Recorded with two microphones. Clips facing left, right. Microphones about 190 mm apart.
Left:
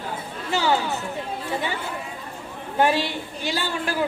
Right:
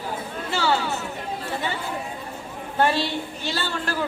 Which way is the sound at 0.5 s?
15° left (ahead or behind).